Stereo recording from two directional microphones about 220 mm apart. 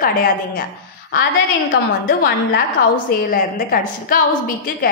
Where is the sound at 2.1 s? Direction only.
45° left (ahead or behind).